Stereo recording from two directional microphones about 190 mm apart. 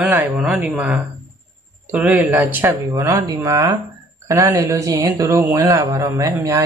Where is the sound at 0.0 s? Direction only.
10° right (ahead or behind).